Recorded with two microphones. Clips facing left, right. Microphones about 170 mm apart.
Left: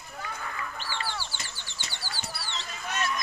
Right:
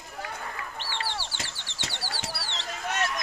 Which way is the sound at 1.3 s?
90° right.